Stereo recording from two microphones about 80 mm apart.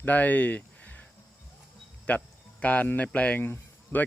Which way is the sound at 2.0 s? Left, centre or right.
Centre.